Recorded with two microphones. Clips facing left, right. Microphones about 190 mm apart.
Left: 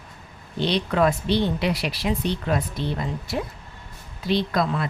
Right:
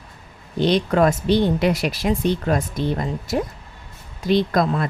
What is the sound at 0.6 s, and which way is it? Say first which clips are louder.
Speech: right 4 dB; 45° right (ahead or behind).